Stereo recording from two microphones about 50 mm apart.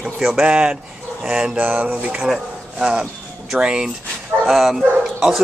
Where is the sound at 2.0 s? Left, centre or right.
Right.